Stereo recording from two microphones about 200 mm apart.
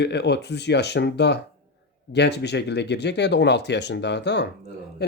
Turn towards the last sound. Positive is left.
turn(degrees=60)  # may be behind; listen again after turning